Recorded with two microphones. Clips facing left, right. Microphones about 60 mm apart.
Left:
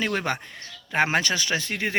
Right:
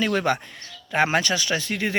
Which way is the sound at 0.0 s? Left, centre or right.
Left.